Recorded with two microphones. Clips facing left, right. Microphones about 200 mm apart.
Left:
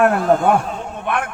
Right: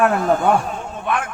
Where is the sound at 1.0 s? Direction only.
60° left (ahead or behind).